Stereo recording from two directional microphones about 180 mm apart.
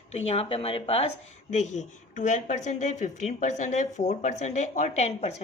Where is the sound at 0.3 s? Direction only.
35° left (ahead or behind).